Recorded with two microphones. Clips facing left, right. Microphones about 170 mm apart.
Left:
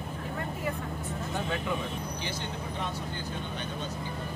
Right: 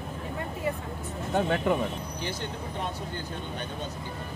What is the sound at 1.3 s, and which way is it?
Speech, 55° right (ahead or behind).